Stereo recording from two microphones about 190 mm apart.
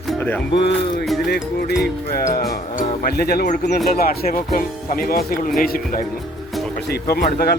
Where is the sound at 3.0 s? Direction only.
55° left (ahead or behind).